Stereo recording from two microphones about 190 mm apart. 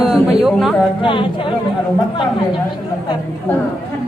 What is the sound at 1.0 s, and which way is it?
Speech, 25° left (ahead or behind).